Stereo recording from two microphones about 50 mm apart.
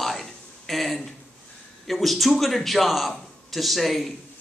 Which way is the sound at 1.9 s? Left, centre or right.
Centre.